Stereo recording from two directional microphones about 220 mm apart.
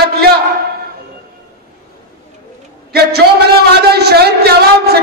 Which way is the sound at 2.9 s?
45° right (ahead or behind).